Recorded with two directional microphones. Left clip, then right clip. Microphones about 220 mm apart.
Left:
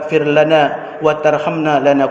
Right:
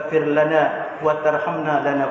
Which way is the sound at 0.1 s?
60° left (ahead or behind).